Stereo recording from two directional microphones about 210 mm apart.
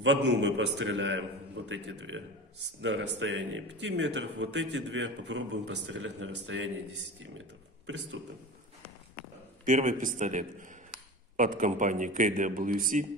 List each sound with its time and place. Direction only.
0.0 s speech: 60° right (ahead or behind)
9.7 s a man's voice: 35° right (ahead or behind)